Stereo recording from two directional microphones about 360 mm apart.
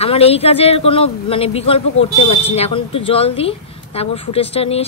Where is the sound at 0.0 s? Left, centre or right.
Centre.